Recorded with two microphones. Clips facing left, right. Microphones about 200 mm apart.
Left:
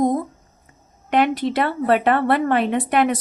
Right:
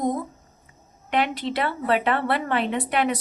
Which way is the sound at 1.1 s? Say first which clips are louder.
Left 6 dB; 45° left (ahead or behind).